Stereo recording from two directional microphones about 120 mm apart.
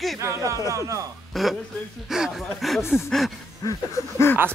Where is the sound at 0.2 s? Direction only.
25° right (ahead or behind).